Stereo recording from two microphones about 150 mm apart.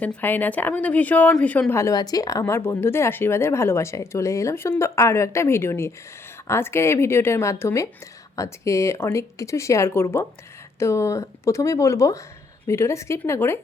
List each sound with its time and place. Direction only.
0.0 s speech: 10° left (ahead or behind)